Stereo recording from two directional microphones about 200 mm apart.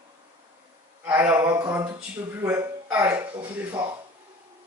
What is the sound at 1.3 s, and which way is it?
Speech, 20° right (ahead or behind).